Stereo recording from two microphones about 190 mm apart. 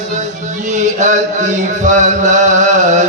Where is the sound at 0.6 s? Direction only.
40° right (ahead or behind).